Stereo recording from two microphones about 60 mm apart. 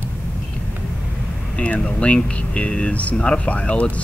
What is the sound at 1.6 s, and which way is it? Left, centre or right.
Speech, left.